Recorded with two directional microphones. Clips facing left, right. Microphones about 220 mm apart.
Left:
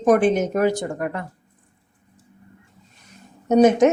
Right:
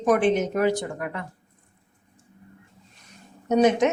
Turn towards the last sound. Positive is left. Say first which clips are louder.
# left 5 dB
turn(degrees=45)  # may be behind; listen again after turning